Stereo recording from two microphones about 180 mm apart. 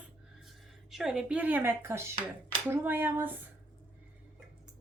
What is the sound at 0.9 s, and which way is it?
Speech, centre (ahead or behind).